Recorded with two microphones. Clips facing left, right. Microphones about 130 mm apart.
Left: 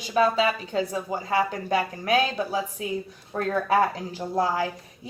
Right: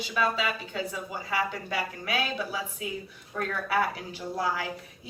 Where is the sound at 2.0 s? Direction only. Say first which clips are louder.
Left 7 dB; 45° left (ahead or behind).